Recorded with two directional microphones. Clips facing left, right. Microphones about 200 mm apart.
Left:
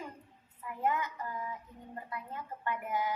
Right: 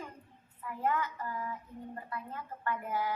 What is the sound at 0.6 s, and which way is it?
Speech, 15° left (ahead or behind).